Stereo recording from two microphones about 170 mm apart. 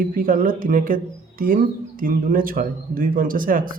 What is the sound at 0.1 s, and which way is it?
Speech, 55° right (ahead or behind).